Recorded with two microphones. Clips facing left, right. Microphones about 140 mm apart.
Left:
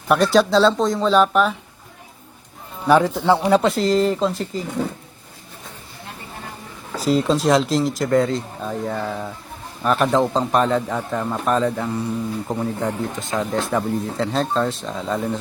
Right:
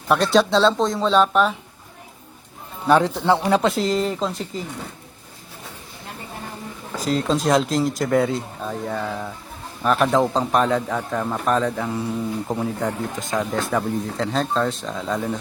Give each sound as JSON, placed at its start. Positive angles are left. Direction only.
{"t": 0.1, "sound": "speech", "side_deg": 0}
{"t": 2.8, "sound": "speech", "side_deg": 0}
{"t": 7.0, "sound": "speech", "side_deg": 0}